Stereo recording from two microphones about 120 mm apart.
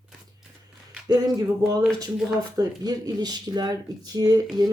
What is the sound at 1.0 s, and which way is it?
Speech, 30° right (ahead or behind).